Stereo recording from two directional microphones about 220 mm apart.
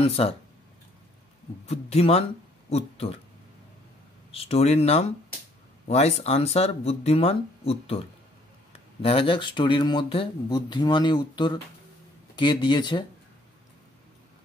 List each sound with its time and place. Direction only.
0.0 s speech: 25° left (ahead or behind)
1.7 s speech: 30° left (ahead or behind)
2.7 s a sound: 25° left (ahead or behind)
4.3 s speech: 25° left (ahead or behind)
9.0 s speech: 25° left (ahead or behind)